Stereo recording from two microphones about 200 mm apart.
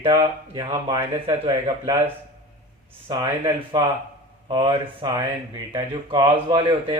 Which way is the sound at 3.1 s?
20° right (ahead or behind).